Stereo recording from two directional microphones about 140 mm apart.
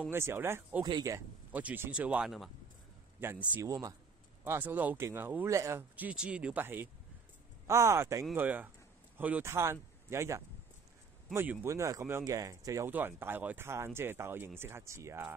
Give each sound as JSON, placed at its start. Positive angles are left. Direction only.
{"t": 0.1, "sound": "speech", "side_deg": -15}
{"t": 0.8, "sound": "speech", "side_deg": -30}
{"t": 1.1, "sound": "speech", "side_deg": -10}
{"t": 3.2, "sound": "speech", "side_deg": -15}
{"t": 3.6, "sound": "speech", "side_deg": -25}
{"t": 4.5, "sound": "speech", "side_deg": -15}